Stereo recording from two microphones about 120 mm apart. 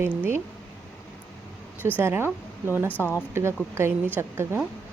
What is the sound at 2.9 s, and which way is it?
Speech, 15° left (ahead or behind).